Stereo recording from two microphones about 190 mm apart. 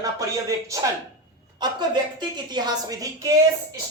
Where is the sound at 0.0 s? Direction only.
15° right (ahead or behind).